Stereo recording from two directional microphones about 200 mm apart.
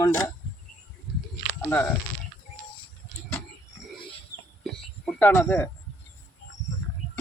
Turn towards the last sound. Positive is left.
turn(degrees=10)  # may be behind; listen again after turning